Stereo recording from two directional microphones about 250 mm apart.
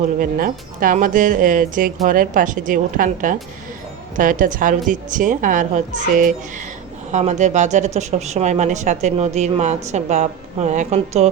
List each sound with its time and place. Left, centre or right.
0.2 s speech: right